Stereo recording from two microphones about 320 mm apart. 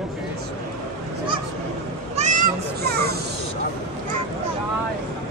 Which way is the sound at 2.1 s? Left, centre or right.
Right.